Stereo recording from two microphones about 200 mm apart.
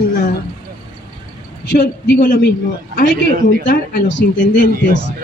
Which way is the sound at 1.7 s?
60° left (ahead or behind).